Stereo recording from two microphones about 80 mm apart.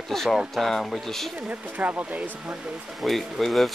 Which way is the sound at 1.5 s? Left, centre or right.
Right.